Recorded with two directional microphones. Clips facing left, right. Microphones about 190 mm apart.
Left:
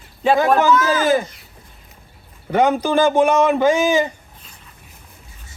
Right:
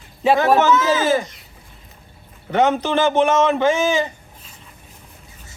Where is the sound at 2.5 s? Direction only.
10° left (ahead or behind).